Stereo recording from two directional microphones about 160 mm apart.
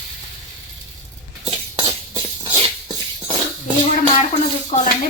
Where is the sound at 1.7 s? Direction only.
30° right (ahead or behind).